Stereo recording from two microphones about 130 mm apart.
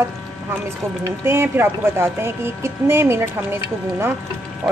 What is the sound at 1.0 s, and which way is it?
Speech, 20° right (ahead or behind).